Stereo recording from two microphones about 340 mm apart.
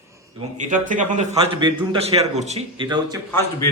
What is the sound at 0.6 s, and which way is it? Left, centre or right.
A man's voice, right.